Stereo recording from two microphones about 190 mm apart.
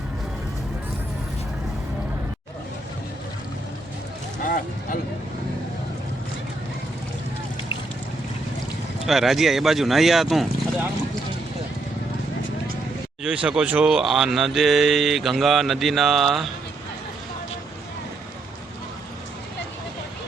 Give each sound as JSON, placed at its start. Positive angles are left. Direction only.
{"t": 4.4, "sound": "a sound", "side_deg": 45}
{"t": 9.0, "sound": "speech", "side_deg": 0}
{"t": 13.2, "sound": "speech", "side_deg": -5}